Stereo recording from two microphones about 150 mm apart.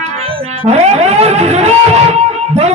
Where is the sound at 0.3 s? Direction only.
35° right (ahead or behind).